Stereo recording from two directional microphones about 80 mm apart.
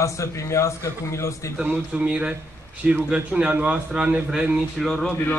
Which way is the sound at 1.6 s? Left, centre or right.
Centre.